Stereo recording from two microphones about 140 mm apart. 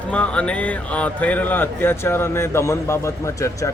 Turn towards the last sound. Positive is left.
turn(degrees=20)  # may be behind; listen again after turning